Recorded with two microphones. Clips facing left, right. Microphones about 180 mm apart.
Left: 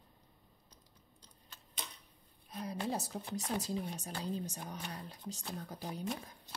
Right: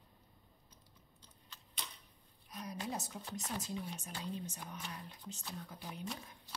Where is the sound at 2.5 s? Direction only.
30° left (ahead or behind).